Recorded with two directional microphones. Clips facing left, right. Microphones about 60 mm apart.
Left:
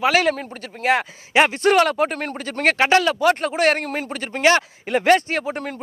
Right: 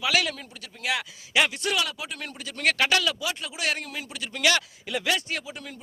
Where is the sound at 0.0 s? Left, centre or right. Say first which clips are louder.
Left 8 dB; left.